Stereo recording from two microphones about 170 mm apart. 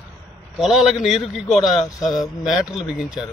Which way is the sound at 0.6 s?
Centre (ahead or behind).